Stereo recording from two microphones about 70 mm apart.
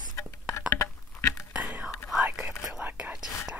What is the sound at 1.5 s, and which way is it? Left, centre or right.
Whispering, centre.